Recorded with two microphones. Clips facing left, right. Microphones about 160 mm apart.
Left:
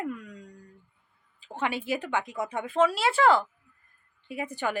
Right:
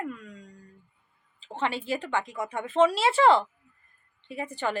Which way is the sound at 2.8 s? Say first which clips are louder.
Right 2 dB; 25° right (ahead or behind).